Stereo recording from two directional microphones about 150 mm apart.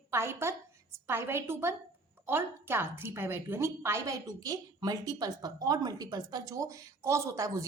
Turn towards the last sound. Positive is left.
turn(degrees=-20)  # may be behind; listen again after turning